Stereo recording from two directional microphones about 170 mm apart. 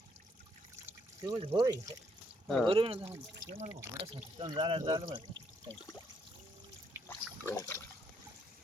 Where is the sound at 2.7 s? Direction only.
30° right (ahead or behind).